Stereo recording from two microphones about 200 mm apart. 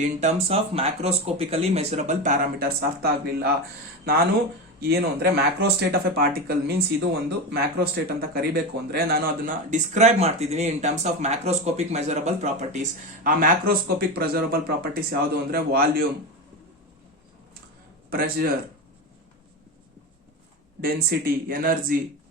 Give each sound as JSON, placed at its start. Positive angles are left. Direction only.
{"t": 0.0, "sound": "speech", "side_deg": -35}
{"t": 4.8, "sound": "speech", "side_deg": -55}
{"t": 18.1, "sound": "speech", "side_deg": -50}
{"t": 20.8, "sound": "speech", "side_deg": -50}